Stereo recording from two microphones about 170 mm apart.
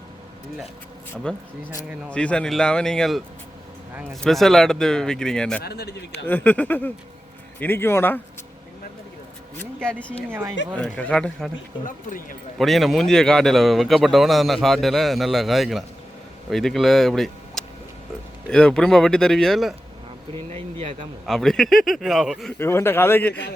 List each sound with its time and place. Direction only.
1.1 s speech: 5° left (ahead or behind)
5.6 s speech: 75° left (ahead or behind)
6.2 s a man's voice: 10° left (ahead or behind)
9.8 s a man's voice: 5° left (ahead or behind)
10.2 s speech: 10° right (ahead or behind)
10.8 s speech: 5° left (ahead or behind)
11.9 s speech: 55° left (ahead or behind)
12.5 s speech: centre (ahead or behind)
20.5 s speech: 35° right (ahead or behind)
21.2 s speech: centre (ahead or behind)
22.5 s a man's voice: 15° left (ahead or behind)